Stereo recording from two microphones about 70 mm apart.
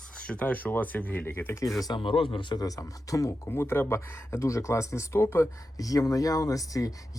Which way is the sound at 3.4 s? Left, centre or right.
Left.